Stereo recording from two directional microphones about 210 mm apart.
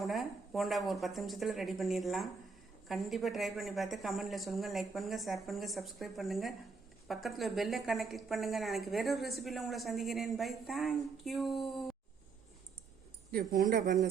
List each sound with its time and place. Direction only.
0.0 s a woman's voice: centre (ahead or behind)
13.3 s speech: 45° right (ahead or behind)